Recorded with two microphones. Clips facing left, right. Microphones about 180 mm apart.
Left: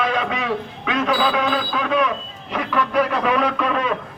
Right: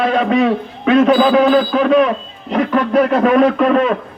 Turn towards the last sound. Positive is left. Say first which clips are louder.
# right 9 dB
turn(degrees=-45)  # may be behind; listen again after turning